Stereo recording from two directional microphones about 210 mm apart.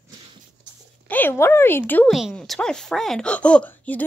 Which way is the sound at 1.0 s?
10° left (ahead or behind).